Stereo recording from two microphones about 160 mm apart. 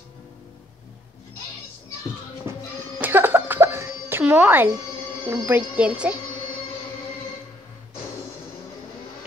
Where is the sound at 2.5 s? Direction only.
15° right (ahead or behind).